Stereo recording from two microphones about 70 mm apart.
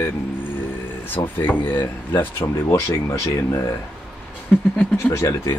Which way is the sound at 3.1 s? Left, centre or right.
Left.